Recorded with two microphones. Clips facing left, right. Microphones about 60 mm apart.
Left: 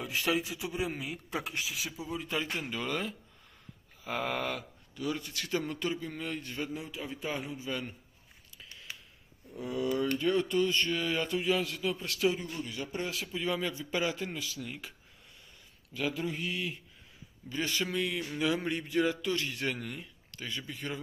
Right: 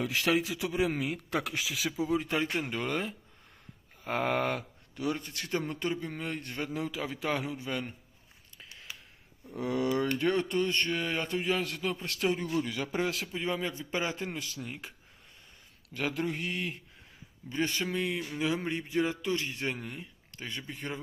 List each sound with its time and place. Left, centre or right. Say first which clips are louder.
0.0 s speech: right 3 dB; right
2.6 s speech: right 2 dB; right
6.8 s a man's voice: right 5 dB; right
9.5 s speech: right 3 dB; right
10.5 s speech: left 1 dB; right
12.4 s speech: right 6 dB; right
13.3 s speech: even; right
15.9 s speech: right 1 dB; right
17.9 s a man's voice: even; centre